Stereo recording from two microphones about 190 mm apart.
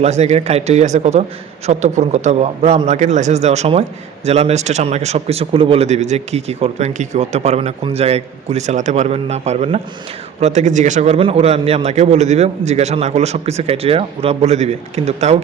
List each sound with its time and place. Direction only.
0.0 s a man's voice: 35° right (ahead or behind)